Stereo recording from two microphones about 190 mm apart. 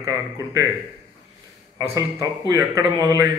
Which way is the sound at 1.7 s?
20° right (ahead or behind).